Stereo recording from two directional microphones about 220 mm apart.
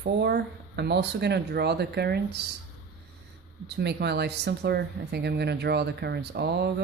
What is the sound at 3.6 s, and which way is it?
Speech, 50° right (ahead or behind).